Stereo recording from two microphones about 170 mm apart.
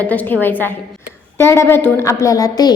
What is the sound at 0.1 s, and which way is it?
A woman's voice, 10° left (ahead or behind).